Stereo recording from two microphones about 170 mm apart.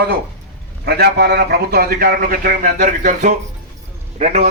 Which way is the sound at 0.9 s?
70° right (ahead or behind).